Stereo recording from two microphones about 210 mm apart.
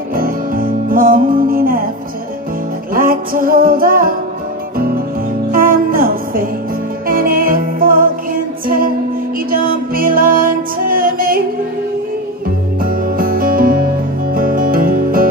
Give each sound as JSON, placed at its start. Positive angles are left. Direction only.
{"t": 0.1, "sound": "music", "side_deg": -40}
{"t": 2.9, "sound": "music", "side_deg": -40}
{"t": 12.8, "sound": "music", "side_deg": -40}